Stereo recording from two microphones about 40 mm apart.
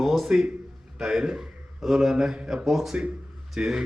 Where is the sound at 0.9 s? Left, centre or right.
Centre.